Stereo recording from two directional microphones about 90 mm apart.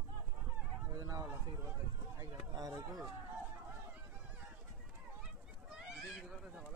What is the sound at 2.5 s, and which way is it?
Speech, 45° right (ahead or behind).